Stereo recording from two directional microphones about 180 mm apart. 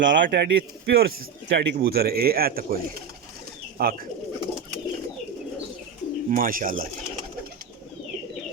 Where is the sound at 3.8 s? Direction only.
55° right (ahead or behind).